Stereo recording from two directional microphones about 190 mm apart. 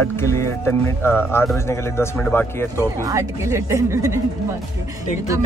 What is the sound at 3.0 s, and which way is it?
A woman's voice, 15° right (ahead or behind).